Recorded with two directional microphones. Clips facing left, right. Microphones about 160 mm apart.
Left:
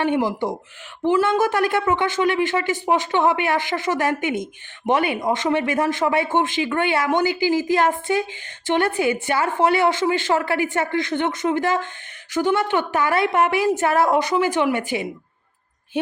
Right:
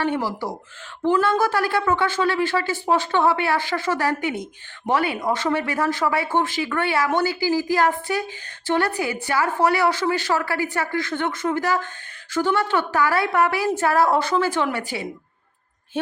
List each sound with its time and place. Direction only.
0.0 s a woman's voice: 20° left (ahead or behind)